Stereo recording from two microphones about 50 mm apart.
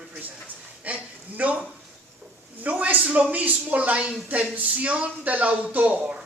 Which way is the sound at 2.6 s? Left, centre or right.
Right.